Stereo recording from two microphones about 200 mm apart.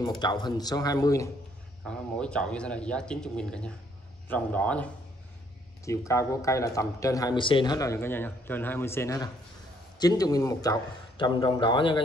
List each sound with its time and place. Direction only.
0.2 s a man's voice: 20° left (ahead or behind)
1.9 s speech: 5° left (ahead or behind)
5.9 s a man's voice: 15° left (ahead or behind)